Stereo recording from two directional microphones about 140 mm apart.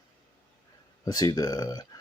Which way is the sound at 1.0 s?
30° left (ahead or behind).